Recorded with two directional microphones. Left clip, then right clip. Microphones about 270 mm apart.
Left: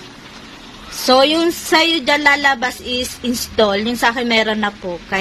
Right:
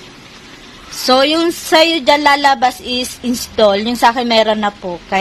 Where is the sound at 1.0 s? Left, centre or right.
Centre.